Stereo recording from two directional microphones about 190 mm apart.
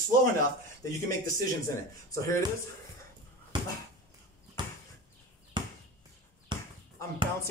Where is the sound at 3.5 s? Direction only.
25° right (ahead or behind).